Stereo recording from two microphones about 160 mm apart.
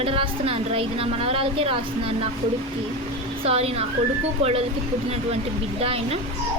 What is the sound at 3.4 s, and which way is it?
Speech, 40° right (ahead or behind).